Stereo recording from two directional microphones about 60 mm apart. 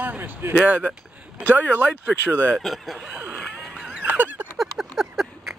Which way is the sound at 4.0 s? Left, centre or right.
Right.